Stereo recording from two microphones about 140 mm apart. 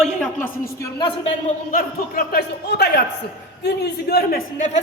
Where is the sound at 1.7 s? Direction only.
90° left.